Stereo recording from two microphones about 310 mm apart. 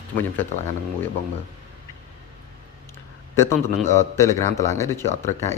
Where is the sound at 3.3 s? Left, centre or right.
Centre.